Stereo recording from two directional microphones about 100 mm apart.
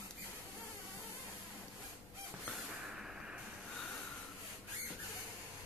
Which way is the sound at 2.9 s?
5° right (ahead or behind).